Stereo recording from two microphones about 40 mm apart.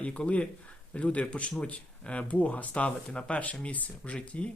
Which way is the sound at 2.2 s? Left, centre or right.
Left.